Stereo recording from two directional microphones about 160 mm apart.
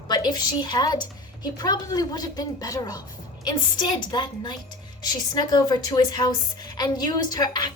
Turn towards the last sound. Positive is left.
turn(degrees=25)  # may be behind; listen again after turning